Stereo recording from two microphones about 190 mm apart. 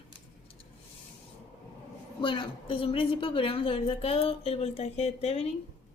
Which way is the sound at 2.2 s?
25° left (ahead or behind).